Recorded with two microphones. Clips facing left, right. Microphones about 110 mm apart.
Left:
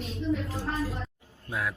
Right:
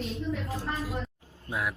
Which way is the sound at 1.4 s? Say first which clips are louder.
Even; 25° right (ahead or behind).